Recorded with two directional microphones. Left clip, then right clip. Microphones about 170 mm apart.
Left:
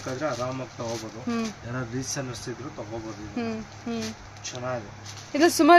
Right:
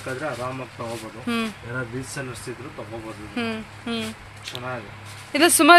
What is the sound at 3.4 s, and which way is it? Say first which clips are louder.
Speech: right 4 dB; 5° left (ahead or behind).